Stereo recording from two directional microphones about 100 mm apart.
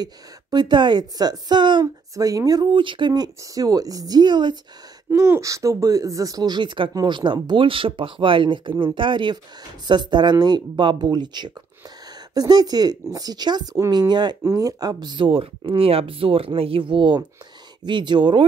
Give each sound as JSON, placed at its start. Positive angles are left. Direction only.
{"t": 0.0, "sound": "speech", "side_deg": -45}
{"t": 2.1, "sound": "speech", "side_deg": -35}
{"t": 2.7, "sound": "speech", "side_deg": -55}
{"t": 5.1, "sound": "speech", "side_deg": -30}
{"t": 14.4, "sound": "speech", "side_deg": -35}